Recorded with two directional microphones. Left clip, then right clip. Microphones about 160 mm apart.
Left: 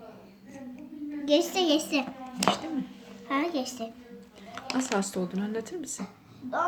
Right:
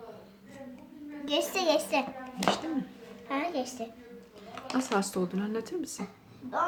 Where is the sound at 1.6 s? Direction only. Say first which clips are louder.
Even; 35° right (ahead or behind).